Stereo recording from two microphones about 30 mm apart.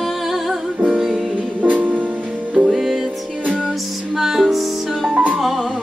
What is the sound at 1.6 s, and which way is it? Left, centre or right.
Music, right.